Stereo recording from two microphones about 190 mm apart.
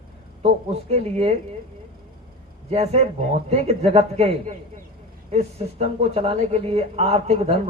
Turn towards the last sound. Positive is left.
turn(degrees=-30)  # may be behind; listen again after turning